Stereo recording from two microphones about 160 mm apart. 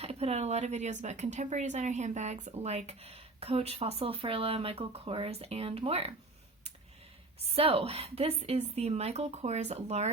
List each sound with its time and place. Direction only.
0.0 s speech: 40° right (ahead or behind)
7.5 s speech: 35° right (ahead or behind)